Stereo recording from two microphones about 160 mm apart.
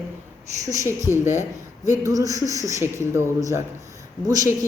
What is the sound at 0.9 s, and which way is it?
Speech, 15° left (ahead or behind).